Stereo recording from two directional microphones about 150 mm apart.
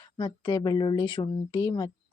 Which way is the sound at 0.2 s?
35° left (ahead or behind).